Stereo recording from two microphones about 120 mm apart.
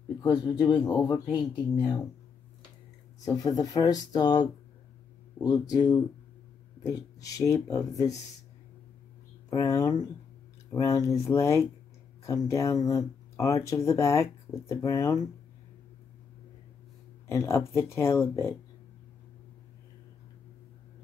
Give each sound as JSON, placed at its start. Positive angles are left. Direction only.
{"t": 0.2, "sound": "speech", "side_deg": 35}
{"t": 3.3, "sound": "speech", "side_deg": 30}
{"t": 9.5, "sound": "speech", "side_deg": 30}
{"t": 17.3, "sound": "speech", "side_deg": 25}